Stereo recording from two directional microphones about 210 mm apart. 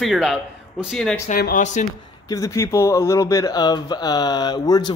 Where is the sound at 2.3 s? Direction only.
15° left (ahead or behind).